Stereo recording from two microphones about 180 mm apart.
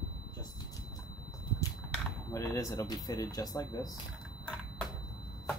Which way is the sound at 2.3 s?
20° left (ahead or behind).